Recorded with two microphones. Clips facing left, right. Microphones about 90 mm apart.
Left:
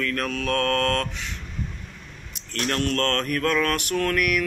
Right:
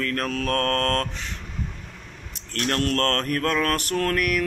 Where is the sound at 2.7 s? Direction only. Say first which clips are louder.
Right 1 dB; 40° right (ahead or behind).